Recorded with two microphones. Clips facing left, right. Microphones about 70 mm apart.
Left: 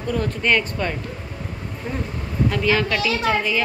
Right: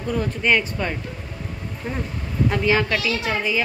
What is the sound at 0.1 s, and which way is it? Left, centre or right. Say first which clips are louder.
Speech: even; centre.